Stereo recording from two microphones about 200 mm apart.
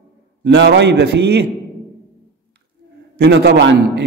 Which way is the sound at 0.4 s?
60° right (ahead or behind).